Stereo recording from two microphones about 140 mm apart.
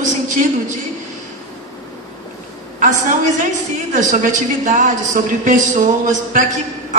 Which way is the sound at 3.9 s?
65° right (ahead or behind).